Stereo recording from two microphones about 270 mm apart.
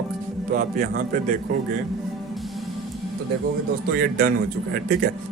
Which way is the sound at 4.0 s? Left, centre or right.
Right.